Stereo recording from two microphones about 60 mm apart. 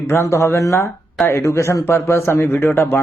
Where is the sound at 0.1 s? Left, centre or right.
Left.